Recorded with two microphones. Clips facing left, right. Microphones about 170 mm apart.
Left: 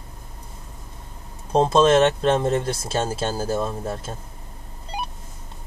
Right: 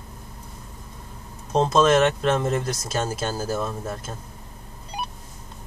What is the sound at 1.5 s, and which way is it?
Speech, 30° left (ahead or behind).